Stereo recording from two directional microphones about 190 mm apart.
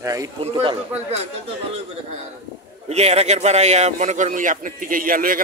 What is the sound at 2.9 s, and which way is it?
A man's voice, 35° right (ahead or behind).